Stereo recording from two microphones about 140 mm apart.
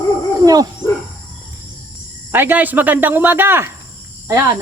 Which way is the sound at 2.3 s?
15° right (ahead or behind).